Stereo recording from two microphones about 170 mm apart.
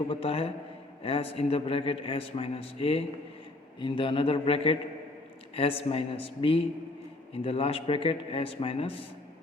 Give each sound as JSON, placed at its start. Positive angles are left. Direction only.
{"t": 0.1, "sound": "speech", "side_deg": 35}